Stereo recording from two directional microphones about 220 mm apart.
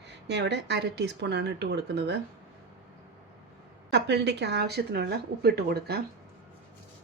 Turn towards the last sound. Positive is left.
turn(degrees=-45)  # may be behind; listen again after turning